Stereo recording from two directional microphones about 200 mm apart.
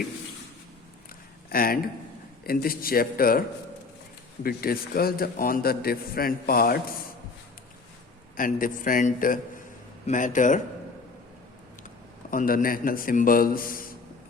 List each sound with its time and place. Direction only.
1.5 s a man's voice: 50° left (ahead or behind)
4.4 s a man's voice: 50° left (ahead or behind)
8.4 s a man's voice: 45° left (ahead or behind)
12.3 s a man's voice: 40° left (ahead or behind)